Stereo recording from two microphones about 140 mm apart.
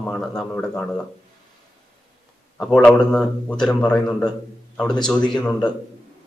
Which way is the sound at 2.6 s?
5° left (ahead or behind).